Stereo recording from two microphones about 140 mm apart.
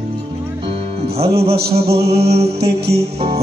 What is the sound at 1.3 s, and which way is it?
Mantra, 45° right (ahead or behind).